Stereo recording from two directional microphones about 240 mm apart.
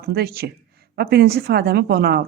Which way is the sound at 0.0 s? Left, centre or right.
Right.